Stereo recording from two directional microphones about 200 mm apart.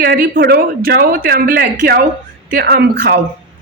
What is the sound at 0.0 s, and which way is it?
Speech, 50° right (ahead or behind).